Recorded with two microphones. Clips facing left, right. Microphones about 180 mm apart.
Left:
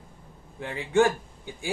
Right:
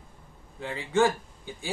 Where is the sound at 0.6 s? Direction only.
15° left (ahead or behind).